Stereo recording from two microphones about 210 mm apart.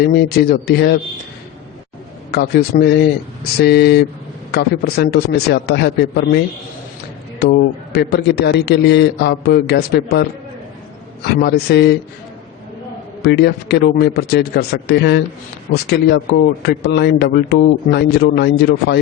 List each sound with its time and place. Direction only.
0.0 s a man's voice: 50° left (ahead or behind)
2.3 s a man's voice: 50° left (ahead or behind)
7.9 s a man's voice: 50° left (ahead or behind)
11.3 s a man's voice: 50° left (ahead or behind)
13.2 s a man's voice: 50° left (ahead or behind)